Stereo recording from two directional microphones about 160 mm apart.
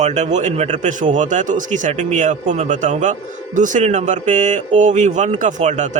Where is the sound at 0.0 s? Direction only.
45° right (ahead or behind).